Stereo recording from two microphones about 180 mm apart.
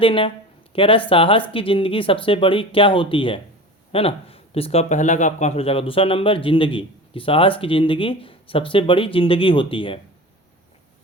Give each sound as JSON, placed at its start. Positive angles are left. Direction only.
{"t": 0.0, "sound": "speech", "side_deg": 30}